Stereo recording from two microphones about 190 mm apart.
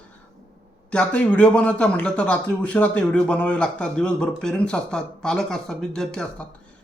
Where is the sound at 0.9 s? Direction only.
5° left (ahead or behind).